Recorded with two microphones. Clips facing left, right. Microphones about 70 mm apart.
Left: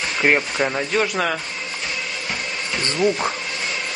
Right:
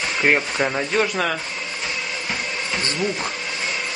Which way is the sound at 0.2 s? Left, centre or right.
Centre.